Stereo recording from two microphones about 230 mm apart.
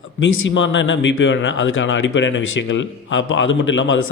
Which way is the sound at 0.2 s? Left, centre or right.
Left.